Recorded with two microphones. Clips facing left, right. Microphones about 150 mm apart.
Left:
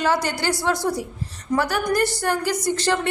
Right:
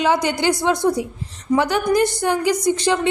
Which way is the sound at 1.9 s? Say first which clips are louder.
Right 3 dB; 15° right (ahead or behind).